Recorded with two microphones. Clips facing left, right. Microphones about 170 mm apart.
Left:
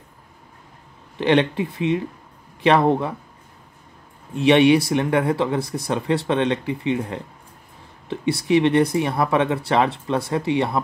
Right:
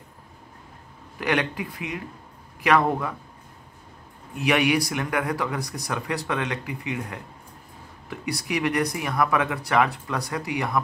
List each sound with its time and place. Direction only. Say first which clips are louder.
1.1 s speech: left 7 dB; 25° left (ahead or behind)
4.3 s speech: left 8 dB; 25° left (ahead or behind)